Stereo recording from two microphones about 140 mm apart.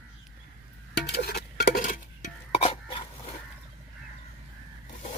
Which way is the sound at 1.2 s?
85° left.